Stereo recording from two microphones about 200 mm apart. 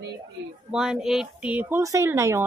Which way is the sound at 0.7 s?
5° right (ahead or behind).